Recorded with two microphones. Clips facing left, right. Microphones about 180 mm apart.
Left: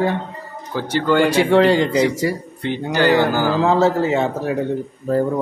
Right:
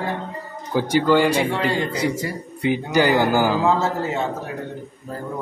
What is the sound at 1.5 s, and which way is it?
Speech, 90° left.